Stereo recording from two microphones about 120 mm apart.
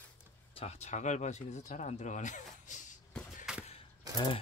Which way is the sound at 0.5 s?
65° left (ahead or behind).